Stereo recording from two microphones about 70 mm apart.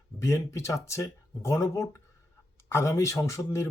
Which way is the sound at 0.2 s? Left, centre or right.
Left.